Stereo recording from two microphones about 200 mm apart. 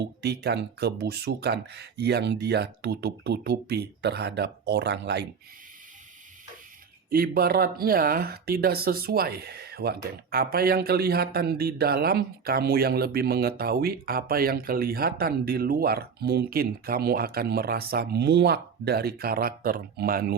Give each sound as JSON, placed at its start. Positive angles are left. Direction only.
{"t": 0.0, "sound": "speech", "side_deg": -55}
{"t": 7.1, "sound": "speech", "side_deg": -50}